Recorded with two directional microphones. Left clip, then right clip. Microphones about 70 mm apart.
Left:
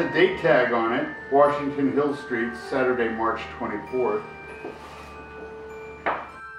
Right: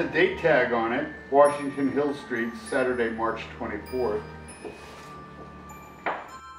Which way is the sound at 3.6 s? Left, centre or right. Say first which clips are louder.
Left 2 dB; centre.